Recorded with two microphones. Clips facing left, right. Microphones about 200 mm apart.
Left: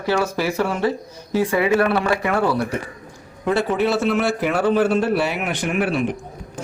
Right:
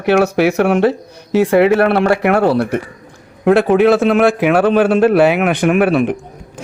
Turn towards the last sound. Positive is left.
turn(degrees=-60)  # may be behind; listen again after turning